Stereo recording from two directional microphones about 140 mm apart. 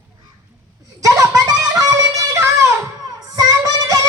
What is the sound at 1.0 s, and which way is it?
Music, 25° right (ahead or behind).